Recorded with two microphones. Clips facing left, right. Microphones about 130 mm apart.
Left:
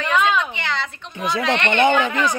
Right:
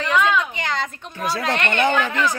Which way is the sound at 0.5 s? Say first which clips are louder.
Right 1 dB; 40° right (ahead or behind).